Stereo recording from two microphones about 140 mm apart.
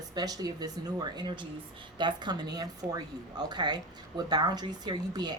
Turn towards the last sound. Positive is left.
turn(degrees=-30)  # may be behind; listen again after turning